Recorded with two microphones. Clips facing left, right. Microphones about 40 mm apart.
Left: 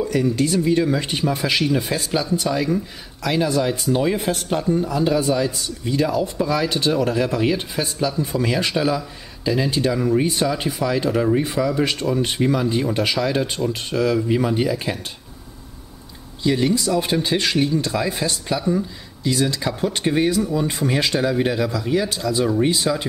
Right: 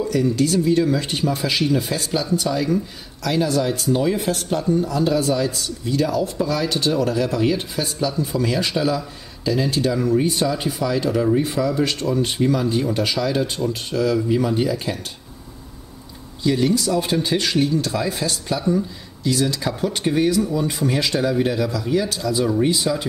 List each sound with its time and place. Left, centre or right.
0.1 s a man's voice: centre
16.4 s a man's voice: centre
20.3 s speech: centre
20.7 s a man's voice: centre